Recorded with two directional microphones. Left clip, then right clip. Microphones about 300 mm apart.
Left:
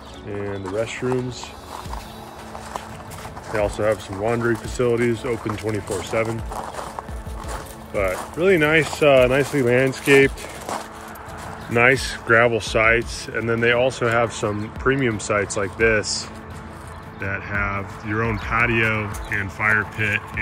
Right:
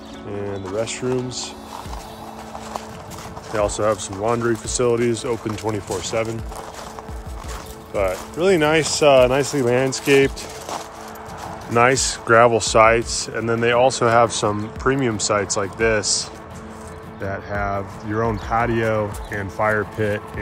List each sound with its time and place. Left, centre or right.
0.4 s speech: centre
3.5 s speech: centre
7.9 s speech: centre